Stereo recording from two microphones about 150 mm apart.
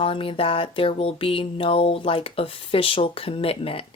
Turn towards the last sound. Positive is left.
turn(degrees=40)  # may be behind; listen again after turning